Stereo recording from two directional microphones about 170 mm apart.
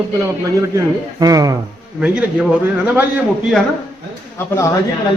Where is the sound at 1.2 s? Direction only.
20° right (ahead or behind).